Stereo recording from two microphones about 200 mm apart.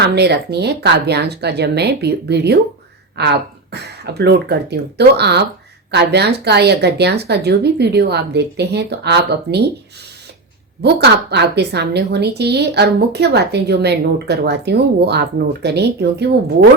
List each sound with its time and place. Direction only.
0.1 s a woman's voice: 55° right (ahead or behind)
10.8 s a woman's voice: 55° right (ahead or behind)